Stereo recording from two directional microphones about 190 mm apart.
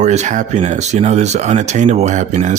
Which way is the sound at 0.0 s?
35° right (ahead or behind).